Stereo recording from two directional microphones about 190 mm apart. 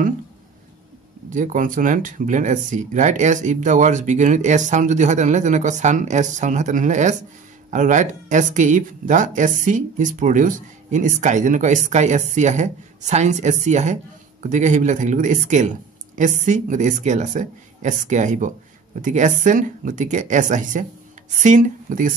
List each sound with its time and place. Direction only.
1.3 s speech: 40° right (ahead or behind)